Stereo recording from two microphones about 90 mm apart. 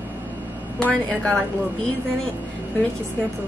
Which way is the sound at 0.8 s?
10° left (ahead or behind).